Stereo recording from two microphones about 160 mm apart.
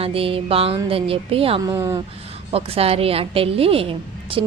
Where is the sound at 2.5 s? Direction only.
40° right (ahead or behind).